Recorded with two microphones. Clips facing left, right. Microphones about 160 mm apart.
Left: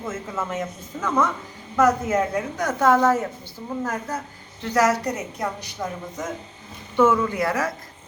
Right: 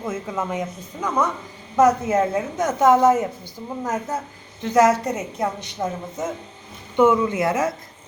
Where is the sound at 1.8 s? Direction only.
25° right (ahead or behind).